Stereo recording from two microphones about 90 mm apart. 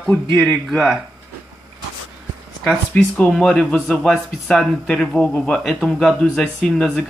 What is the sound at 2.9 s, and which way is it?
Speech, 15° left (ahead or behind).